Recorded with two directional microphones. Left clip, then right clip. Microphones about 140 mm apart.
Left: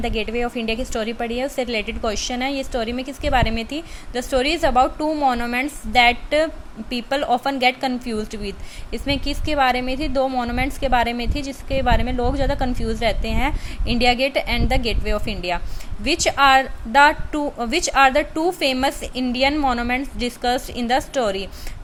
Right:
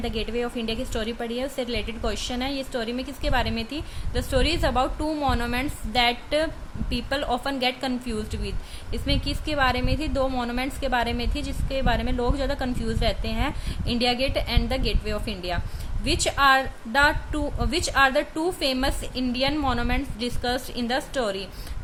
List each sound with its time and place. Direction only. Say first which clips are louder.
0.0 s a woman's voice: left 5 dB; 15° left (ahead or behind)